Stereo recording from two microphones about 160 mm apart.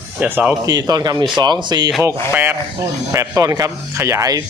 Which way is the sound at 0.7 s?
25° right (ahead or behind).